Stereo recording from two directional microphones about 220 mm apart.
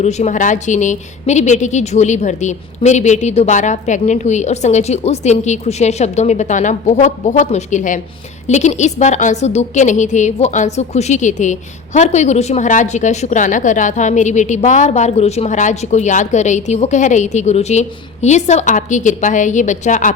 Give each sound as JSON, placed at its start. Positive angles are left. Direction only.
{"t": 0.0, "sound": "a woman's voice", "side_deg": 30}